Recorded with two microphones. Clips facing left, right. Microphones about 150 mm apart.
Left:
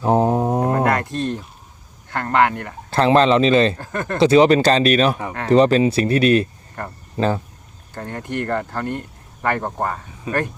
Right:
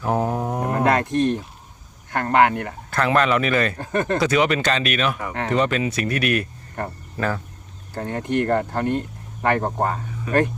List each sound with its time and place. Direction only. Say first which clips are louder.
0.0 s a sound: left 5 dB; 25° left (ahead or behind)
0.9 s speech: right 2 dB; 20° right (ahead or behind)
2.9 s speech: left 5 dB; 30° left (ahead or behind)
3.8 s speech: right 3 dB; 20° right (ahead or behind)
4.2 s speech: left 11 dB; 30° left (ahead or behind)
8.0 s speech: right 3 dB; 20° right (ahead or behind)
10.3 s speech: right 3 dB; 25° left (ahead or behind)